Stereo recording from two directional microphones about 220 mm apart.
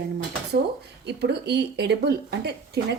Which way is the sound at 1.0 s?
50° right (ahead or behind).